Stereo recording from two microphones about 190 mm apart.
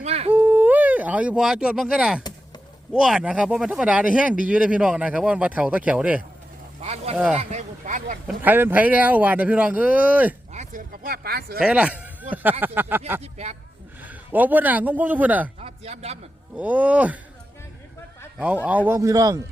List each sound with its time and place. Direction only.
0.0 s humming: 35° right (ahead or behind)
0.3 s a sound: 10° right (ahead or behind)
2.9 s speech: 5° right (ahead or behind)
6.8 s speech: 30° right (ahead or behind)
8.4 s speech: 10° right (ahead or behind)
10.5 s speech: 40° right (ahead or behind)
11.6 s speech: 5° right (ahead or behind)
14.0 s speech: 10° right (ahead or behind)
15.6 s a sound: 35° right (ahead or behind)
16.6 s speech: 10° right (ahead or behind)
18.9 s speech: 15° right (ahead or behind)